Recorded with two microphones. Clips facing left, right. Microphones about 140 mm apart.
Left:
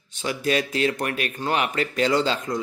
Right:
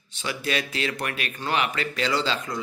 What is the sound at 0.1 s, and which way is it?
Speech, 45° left (ahead or behind).